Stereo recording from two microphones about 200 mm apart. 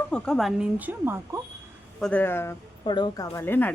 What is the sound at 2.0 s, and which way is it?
Speech, 10° left (ahead or behind).